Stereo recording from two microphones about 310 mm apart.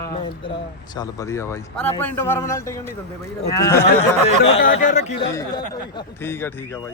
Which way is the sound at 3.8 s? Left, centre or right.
Centre.